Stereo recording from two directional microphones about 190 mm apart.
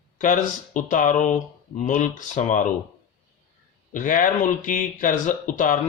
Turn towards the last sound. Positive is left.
turn(degrees=45)  # may be behind; listen again after turning